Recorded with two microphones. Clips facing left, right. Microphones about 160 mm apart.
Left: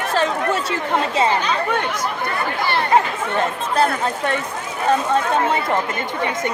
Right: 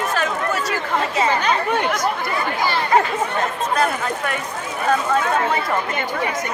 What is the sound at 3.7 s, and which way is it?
Speech, 30° left (ahead or behind).